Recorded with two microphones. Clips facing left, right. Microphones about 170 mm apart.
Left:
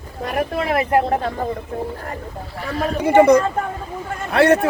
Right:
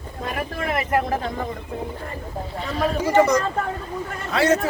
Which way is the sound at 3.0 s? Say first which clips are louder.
Left 7 dB; 60° left (ahead or behind).